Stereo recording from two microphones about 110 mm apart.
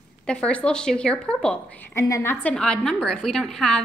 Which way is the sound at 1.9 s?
25° left (ahead or behind).